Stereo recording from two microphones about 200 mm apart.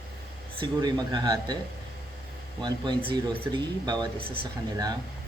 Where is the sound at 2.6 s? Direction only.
20° right (ahead or behind).